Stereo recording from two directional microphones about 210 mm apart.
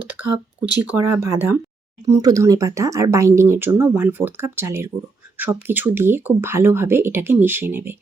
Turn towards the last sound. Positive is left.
turn(degrees=-10)  # may be behind; listen again after turning